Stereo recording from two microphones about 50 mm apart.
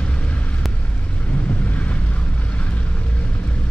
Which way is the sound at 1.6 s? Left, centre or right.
Left.